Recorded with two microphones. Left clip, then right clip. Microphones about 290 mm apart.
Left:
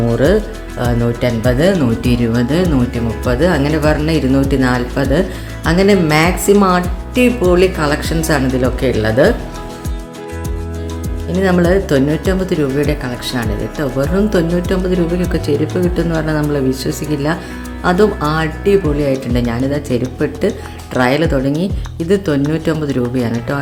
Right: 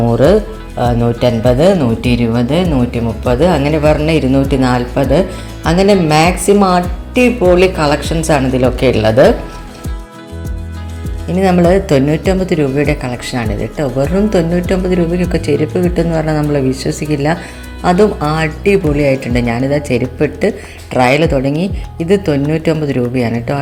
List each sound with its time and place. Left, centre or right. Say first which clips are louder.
0.0 s speech: right 3 dB; centre
5.7 s speech: right 2 dB; left
6.4 s speech: right 1 dB; centre
11.3 s speech: right 3 dB; centre